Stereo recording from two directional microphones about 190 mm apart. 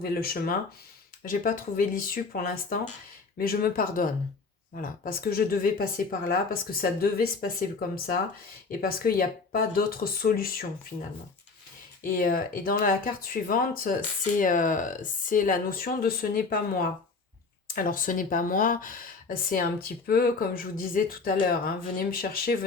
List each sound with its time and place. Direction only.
0.0 s speech: 50° left (ahead or behind)
12.0 s speech: 50° left (ahead or behind)